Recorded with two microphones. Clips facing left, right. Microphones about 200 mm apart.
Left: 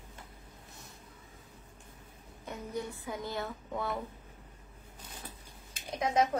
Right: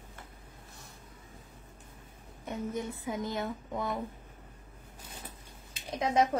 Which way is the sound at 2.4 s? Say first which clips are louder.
Right 3 dB; 20° right (ahead or behind).